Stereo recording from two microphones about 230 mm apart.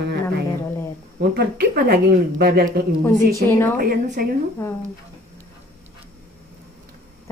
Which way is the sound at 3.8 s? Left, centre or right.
Right.